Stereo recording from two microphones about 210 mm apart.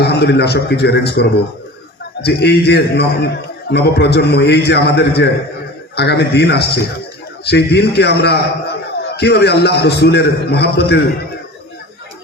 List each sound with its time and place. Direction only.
0.0 s a man's voice: 50° left (ahead or behind)